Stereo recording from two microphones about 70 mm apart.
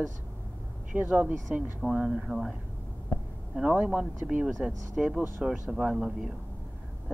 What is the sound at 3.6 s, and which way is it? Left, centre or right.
Speech, centre.